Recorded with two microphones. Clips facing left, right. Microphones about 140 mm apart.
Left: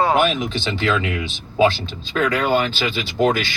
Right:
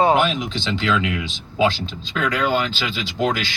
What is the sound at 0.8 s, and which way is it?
Speech, 50° left (ahead or behind).